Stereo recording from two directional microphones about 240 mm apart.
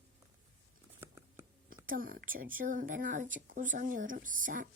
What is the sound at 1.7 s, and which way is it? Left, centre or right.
Speech, right.